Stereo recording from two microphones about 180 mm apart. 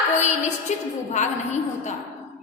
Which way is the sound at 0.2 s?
40° left (ahead or behind).